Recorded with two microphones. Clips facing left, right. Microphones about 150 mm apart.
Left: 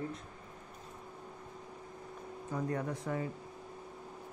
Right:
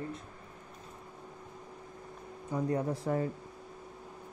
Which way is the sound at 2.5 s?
20° right (ahead or behind).